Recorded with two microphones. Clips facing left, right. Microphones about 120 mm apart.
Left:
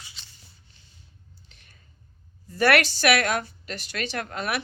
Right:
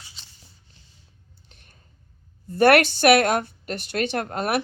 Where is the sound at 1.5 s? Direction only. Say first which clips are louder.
Right 2 dB; 50° right (ahead or behind).